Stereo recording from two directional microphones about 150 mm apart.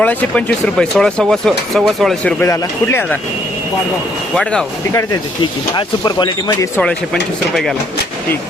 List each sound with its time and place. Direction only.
0.0 s speech: 10° left (ahead or behind)
2.4 s speech: 15° left (ahead or behind)
4.9 s speech: 25° left (ahead or behind)
6.7 s speech: 5° left (ahead or behind)